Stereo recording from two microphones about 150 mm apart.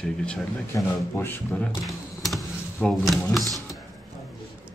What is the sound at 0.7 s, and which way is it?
Speech, 20° left (ahead or behind).